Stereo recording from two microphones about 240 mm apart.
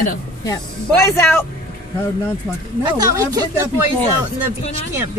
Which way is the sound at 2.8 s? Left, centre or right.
Centre.